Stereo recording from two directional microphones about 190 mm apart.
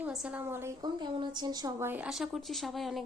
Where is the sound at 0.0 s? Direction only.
5° right (ahead or behind).